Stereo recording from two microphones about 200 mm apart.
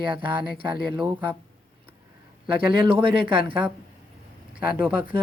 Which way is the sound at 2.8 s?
25° right (ahead or behind).